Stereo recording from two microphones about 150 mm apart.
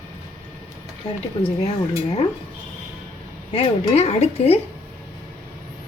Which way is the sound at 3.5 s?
40° left (ahead or behind).